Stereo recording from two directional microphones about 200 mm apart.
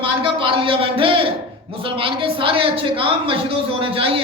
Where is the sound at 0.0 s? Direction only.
25° right (ahead or behind).